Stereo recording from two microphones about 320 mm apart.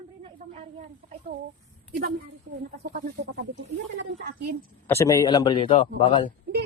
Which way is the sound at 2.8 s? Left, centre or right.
Right.